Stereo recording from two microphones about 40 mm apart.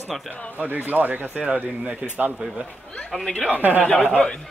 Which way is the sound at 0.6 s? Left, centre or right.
Right.